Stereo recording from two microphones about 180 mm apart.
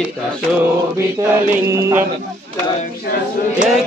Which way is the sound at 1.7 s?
15° right (ahead or behind).